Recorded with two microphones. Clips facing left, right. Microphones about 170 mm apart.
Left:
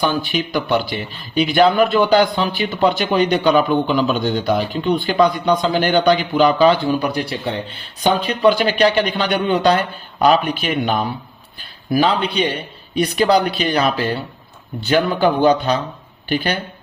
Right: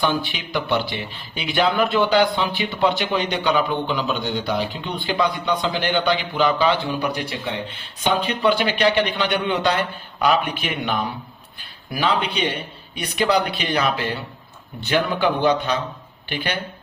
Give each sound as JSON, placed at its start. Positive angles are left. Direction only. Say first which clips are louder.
{"t": 0.3, "sound": "a man's voice", "louder": "left 5 dB", "side_deg": 40}